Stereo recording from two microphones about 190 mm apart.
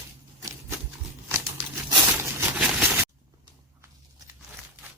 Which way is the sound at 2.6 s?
5° right (ahead or behind).